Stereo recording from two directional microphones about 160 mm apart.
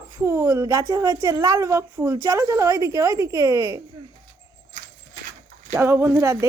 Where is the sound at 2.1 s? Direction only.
25° right (ahead or behind).